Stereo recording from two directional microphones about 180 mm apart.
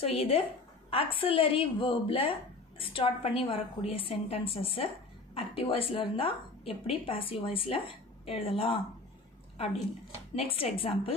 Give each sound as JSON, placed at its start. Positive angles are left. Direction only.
{"t": 0.0, "sound": "a woman's voice", "side_deg": 30}
{"t": 10.3, "sound": "a woman's voice", "side_deg": 30}